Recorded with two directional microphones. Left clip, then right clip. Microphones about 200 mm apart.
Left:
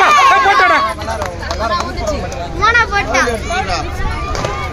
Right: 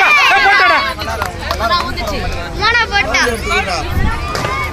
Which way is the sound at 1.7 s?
60° left (ahead or behind).